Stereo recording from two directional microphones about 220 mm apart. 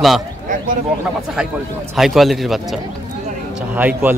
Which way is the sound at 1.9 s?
Centre (ahead or behind).